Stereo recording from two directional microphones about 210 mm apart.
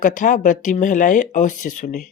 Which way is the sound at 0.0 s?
40° left (ahead or behind).